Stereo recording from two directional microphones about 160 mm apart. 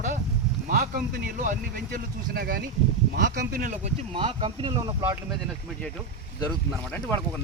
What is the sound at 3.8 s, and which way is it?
Speech, 35° right (ahead or behind).